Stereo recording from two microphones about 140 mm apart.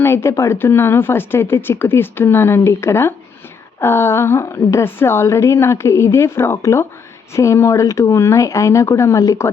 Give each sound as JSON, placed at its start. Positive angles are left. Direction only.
{"t": 0.0, "sound": "a woman's voice", "side_deg": 20}